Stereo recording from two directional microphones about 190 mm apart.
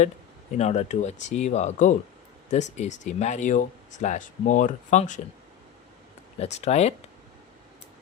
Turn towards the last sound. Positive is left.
turn(degrees=35)  # may be behind; listen again after turning